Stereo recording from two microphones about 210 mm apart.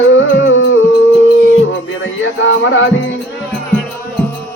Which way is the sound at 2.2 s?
65° left (ahead or behind).